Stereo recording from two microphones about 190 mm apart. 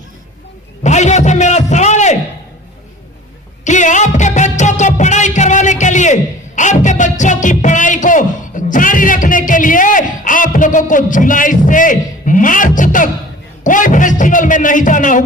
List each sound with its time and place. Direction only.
0.8 s a sound: 40° left (ahead or behind)
3.6 s music: 40° left (ahead or behind)
13.7 s speech: 45° left (ahead or behind)